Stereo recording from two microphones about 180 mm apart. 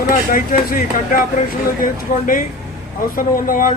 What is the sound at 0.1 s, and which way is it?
Speech, 50° left (ahead or behind).